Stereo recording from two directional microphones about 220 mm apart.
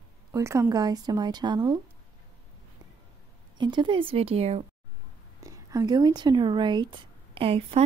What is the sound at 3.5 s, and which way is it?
Speech, 20° right (ahead or behind).